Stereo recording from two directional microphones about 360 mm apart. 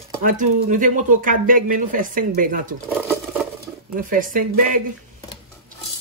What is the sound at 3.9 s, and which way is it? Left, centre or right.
Speech, right.